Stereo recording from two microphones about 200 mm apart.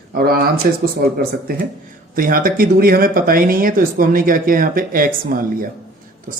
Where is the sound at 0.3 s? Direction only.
50° right (ahead or behind).